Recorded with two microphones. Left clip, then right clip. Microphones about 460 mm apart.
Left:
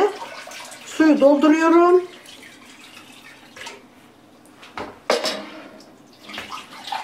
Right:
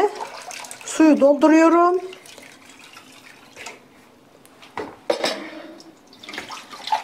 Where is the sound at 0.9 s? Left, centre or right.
Right.